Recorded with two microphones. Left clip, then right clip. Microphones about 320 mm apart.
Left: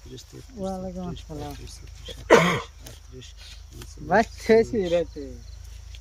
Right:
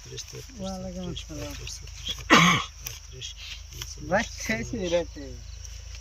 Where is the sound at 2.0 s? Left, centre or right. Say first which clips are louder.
Left 1 dB; centre.